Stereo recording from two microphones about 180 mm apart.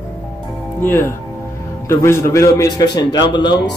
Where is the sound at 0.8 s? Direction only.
10° left (ahead or behind).